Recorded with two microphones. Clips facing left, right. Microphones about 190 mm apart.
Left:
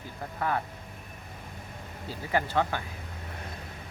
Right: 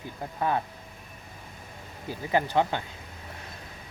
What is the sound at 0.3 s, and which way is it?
Speech, 20° right (ahead or behind).